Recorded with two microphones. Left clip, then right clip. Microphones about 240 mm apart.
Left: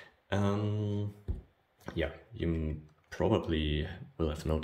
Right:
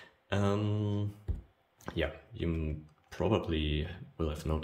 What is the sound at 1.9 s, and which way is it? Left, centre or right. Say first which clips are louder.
Speech: right 1 dB; centre.